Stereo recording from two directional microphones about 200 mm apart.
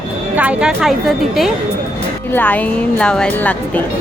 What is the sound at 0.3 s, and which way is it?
A woman's voice, 5° right (ahead or behind).